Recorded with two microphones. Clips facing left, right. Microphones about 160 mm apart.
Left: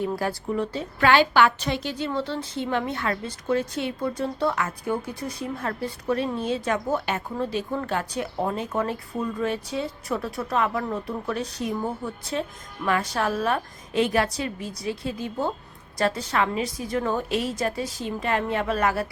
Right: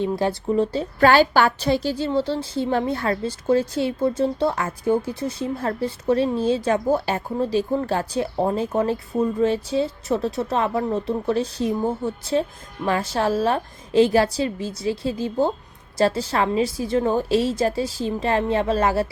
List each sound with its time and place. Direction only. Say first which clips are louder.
0.0 s a woman's voice: right 4 dB; 25° right (ahead or behind)